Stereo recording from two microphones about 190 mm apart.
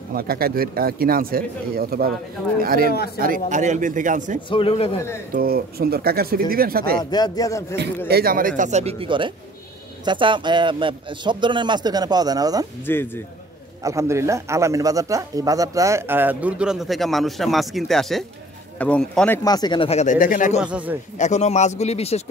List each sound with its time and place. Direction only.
0.1 s speech: 55° right (ahead or behind)
3.4 s speech: 40° right (ahead or behind)
4.5 s speech: 30° left (ahead or behind)
5.3 s speech: 50° right (ahead or behind)
7.0 s speech: 20° left (ahead or behind)
8.1 s a man's voice: 50° right (ahead or behind); by 12.6 s 20° right (ahead or behind)
12.8 s speech: 10° left (ahead or behind)
13.8 s speech: 15° right (ahead or behind); by 19.4 s 5° left (ahead or behind)
19.4 s speech: 20° left (ahead or behind); by 20.6 s 45° left (ahead or behind)
20.6 s speech: 5° right (ahead or behind)
21.2 s speech: 35° left (ahead or behind)